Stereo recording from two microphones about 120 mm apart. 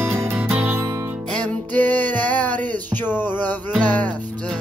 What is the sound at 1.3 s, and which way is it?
Music, 10° left (ahead or behind).